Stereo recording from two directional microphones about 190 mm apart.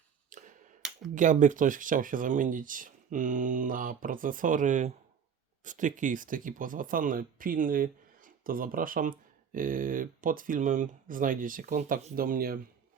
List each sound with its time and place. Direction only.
0.3 s tick: 40° right (ahead or behind)
1.1 s speech: 40° right (ahead or behind)